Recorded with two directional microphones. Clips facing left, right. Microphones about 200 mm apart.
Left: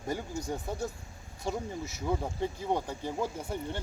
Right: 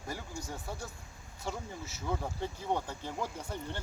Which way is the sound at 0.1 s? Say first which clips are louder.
Left 7 dB; 20° left (ahead or behind).